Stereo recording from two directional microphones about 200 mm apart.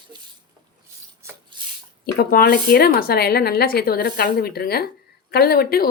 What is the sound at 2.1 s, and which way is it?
Speech, 50° left (ahead or behind).